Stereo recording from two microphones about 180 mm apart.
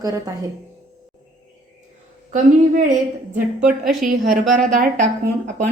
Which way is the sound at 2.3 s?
45° right (ahead or behind).